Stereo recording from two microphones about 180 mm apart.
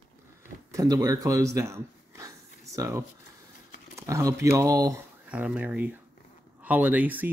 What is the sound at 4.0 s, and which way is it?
Speech, 15° right (ahead or behind).